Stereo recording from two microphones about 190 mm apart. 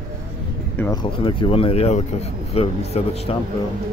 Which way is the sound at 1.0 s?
25° left (ahead or behind).